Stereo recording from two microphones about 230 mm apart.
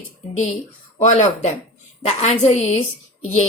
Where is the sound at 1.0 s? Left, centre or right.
Left.